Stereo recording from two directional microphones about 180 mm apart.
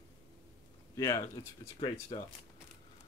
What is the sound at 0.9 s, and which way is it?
Speech, 15° left (ahead or behind).